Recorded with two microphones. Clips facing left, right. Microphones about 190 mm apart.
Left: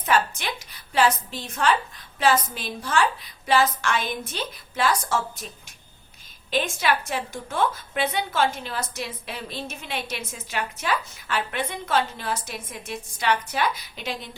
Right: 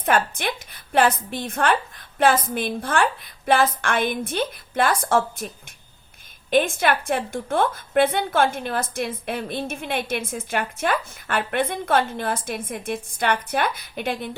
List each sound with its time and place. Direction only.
0.0 s a woman's voice: 55° right (ahead or behind)
6.5 s a woman's voice: 55° right (ahead or behind)